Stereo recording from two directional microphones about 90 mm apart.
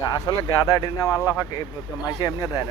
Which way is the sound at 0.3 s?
50° left (ahead or behind).